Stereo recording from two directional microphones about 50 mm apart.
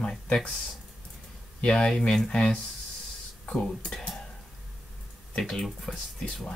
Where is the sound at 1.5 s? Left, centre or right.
Centre.